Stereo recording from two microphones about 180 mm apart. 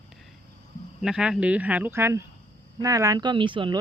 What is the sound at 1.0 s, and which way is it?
Speech, 5° right (ahead or behind).